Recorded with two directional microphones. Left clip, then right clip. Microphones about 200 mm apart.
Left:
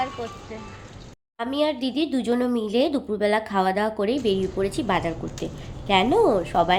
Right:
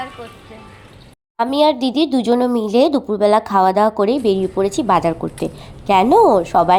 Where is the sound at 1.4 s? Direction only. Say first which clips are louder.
Right 10 dB; 35° right (ahead or behind).